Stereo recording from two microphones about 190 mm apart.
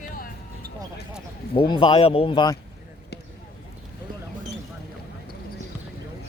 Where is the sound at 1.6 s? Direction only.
30° left (ahead or behind).